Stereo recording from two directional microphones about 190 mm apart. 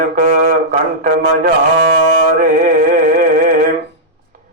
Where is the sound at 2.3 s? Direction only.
45° right (ahead or behind).